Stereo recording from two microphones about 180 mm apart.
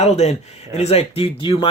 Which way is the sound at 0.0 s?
35° left (ahead or behind).